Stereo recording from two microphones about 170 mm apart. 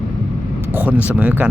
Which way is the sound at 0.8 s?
10° right (ahead or behind).